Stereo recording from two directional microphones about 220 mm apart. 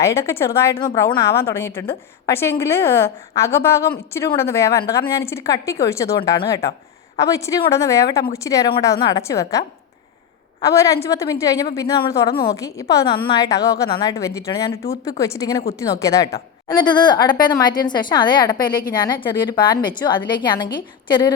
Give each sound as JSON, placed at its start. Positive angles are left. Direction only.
{"t": 0.0, "sound": "a woman's voice", "side_deg": 10}